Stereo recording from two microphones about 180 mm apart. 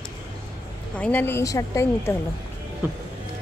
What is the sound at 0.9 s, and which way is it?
A woman's voice, 10° left (ahead or behind).